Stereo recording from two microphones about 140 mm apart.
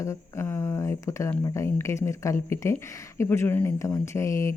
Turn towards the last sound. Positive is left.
turn(degrees=20)  # may be behind; listen again after turning